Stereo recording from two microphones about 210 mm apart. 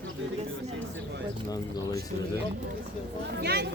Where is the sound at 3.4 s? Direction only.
50° right (ahead or behind).